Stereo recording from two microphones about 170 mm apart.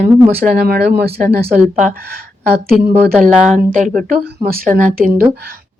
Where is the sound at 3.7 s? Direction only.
50° right (ahead or behind).